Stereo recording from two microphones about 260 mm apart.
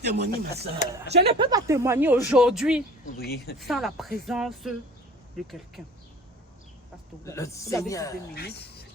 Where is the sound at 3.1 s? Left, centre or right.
Left.